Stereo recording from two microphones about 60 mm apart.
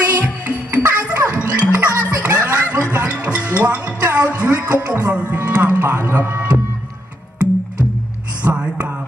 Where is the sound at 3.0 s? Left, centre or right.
Right.